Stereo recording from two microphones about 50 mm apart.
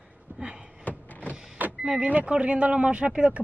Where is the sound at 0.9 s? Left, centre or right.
Left.